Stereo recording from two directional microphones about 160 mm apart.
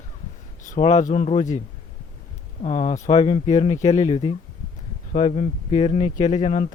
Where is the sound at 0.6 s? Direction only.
45° left (ahead or behind).